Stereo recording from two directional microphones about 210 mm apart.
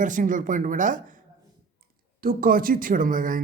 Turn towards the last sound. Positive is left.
turn(degrees=-40)  # may be behind; listen again after turning